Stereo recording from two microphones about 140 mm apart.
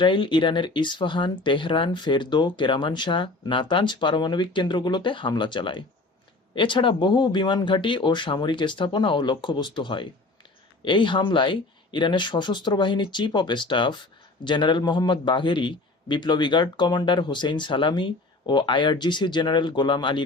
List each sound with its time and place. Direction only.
0.0 s speech: 35° left (ahead or behind)